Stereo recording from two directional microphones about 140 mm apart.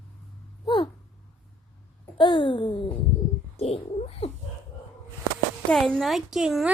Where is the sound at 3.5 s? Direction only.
45° left (ahead or behind).